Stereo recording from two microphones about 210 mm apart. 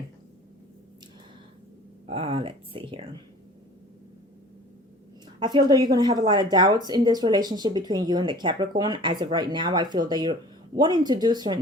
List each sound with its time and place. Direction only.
2.0 s a woman's voice: 25° right (ahead or behind)
5.4 s a woman's voice: 20° right (ahead or behind)